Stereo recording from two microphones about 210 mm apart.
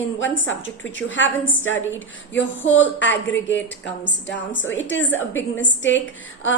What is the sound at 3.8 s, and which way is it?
A woman's voice, 60° left (ahead or behind).